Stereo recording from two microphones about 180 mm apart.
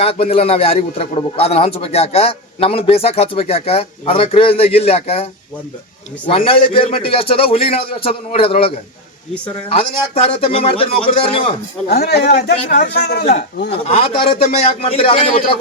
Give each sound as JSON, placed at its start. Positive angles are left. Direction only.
{"t": 0.0, "sound": "a man's voice", "side_deg": 30}
{"t": 11.9, "sound": "a man's voice", "side_deg": 60}
{"t": 13.8, "sound": "a man's voice", "side_deg": 30}